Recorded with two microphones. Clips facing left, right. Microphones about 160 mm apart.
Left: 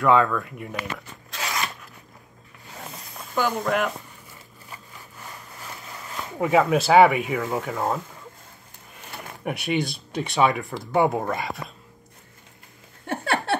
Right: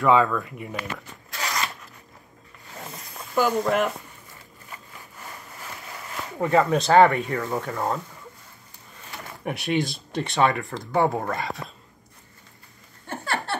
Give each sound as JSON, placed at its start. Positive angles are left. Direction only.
{"t": 0.0, "sound": "speech", "side_deg": 0}
{"t": 3.3, "sound": "speech", "side_deg": -5}
{"t": 6.3, "sound": "speech", "side_deg": 5}
{"t": 9.1, "sound": "speech", "side_deg": 0}
{"t": 13.0, "sound": "a sound", "side_deg": 60}